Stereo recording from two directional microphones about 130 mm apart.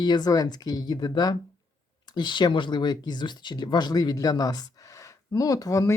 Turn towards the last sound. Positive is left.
turn(degrees=25)  # may be behind; listen again after turning